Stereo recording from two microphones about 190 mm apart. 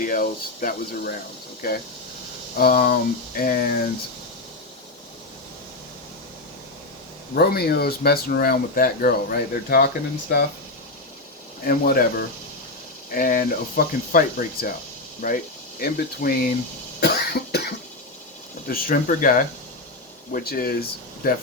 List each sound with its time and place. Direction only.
0.0 s speech: 45° left (ahead or behind)
7.3 s speech: 55° left (ahead or behind)
11.6 s speech: 50° left (ahead or behind)
17.0 s cough: 55° left (ahead or behind)
18.7 s speech: 50° left (ahead or behind)